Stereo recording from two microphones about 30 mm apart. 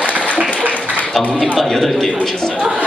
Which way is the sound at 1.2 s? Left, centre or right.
Centre.